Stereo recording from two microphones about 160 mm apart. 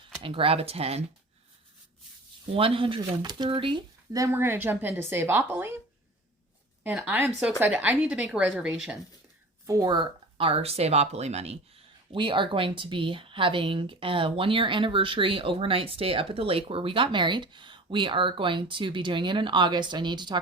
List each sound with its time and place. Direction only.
0.2 s speech: 35° right (ahead or behind)
2.5 s speech: 35° right (ahead or behind); by 5.7 s 15° right (ahead or behind)
6.8 s speech: 10° right (ahead or behind)
9.6 s speech: 20° right (ahead or behind); by 11.5 s 45° right (ahead or behind)
12.1 s speech: 30° right (ahead or behind)